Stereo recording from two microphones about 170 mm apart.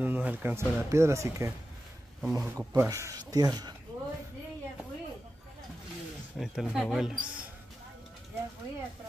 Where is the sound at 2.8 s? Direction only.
15° right (ahead or behind).